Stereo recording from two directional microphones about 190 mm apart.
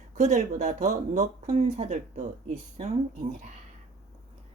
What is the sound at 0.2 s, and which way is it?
Speech, 40° right (ahead or behind).